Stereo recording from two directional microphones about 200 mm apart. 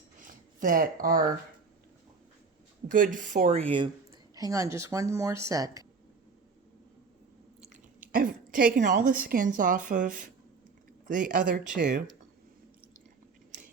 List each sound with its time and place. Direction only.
0.2 s a sound: 45° right (ahead or behind)
2.9 s speech: 40° right (ahead or behind)
4.4 s speech: 15° right (ahead or behind)
8.1 s a woman's voice: 45° right (ahead or behind)